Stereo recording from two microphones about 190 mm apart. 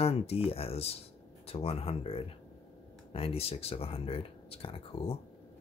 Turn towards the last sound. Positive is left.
turn(degrees=30)  # may be behind; listen again after turning